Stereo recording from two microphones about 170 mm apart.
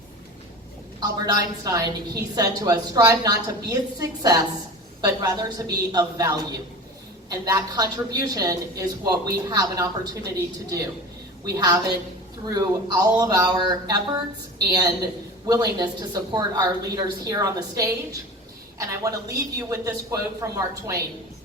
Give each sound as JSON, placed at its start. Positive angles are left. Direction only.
{"t": 0.9, "sound": "a woman's voice", "side_deg": -20}
{"t": 11.4, "sound": "a woman's voice", "side_deg": -20}